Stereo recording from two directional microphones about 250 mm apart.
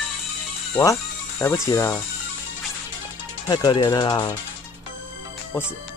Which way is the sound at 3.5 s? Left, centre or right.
Centre.